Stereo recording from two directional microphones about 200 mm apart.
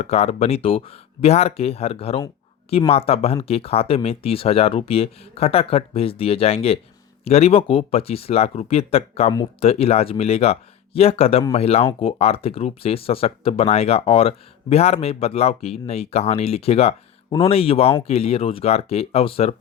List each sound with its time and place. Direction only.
0.0 s speech: 30° left (ahead or behind)